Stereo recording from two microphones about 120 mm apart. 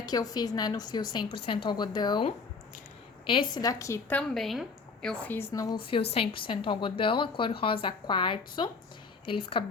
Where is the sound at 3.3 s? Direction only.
45° left (ahead or behind).